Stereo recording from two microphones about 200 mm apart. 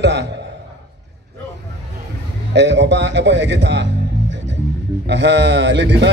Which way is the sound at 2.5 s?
60° right (ahead or behind).